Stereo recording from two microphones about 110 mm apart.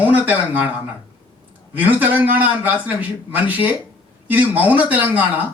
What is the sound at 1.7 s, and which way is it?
A man's voice, 15° right (ahead or behind).